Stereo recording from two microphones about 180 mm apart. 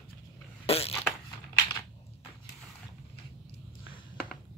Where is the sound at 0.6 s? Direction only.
35° left (ahead or behind).